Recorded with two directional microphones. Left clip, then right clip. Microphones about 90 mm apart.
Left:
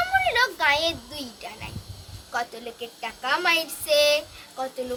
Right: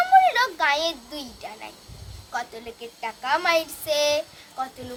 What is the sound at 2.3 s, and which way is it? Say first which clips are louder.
Speech: left 2 dB; 35° right (ahead or behind).